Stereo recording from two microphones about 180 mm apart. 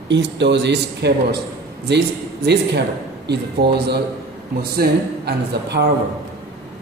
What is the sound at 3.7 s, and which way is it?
Speech, 65° right (ahead or behind).